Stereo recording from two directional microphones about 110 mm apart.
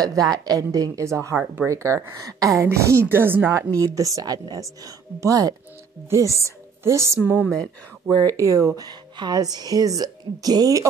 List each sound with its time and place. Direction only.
0.0 s a woman's voice: 35° right (ahead or behind); by 7.4 s 15° right (ahead or behind)
7.4 s speech: 5° left (ahead or behind)
8.1 s speech: 30° right (ahead or behind)